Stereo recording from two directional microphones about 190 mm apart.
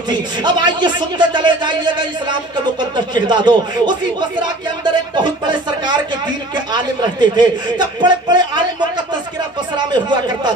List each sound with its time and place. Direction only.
0.1 s speech: 25° right (ahead or behind)